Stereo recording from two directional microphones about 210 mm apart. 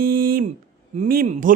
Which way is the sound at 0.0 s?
45° right (ahead or behind).